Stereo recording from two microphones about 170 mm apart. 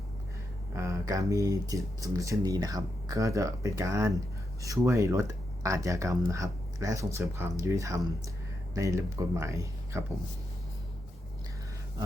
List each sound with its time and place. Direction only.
0.7 s speech: 15° right (ahead or behind)